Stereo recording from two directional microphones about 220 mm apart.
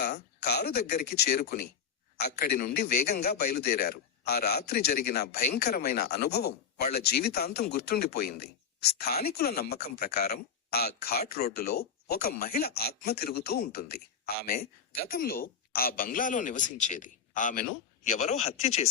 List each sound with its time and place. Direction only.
0.3 s speech: 45° left (ahead or behind); by 18.9 s 30° left (ahead or behind)